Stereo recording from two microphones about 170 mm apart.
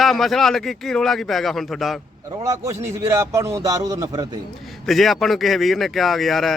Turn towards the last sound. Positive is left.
turn(degrees=0)  # may be behind; listen again after turning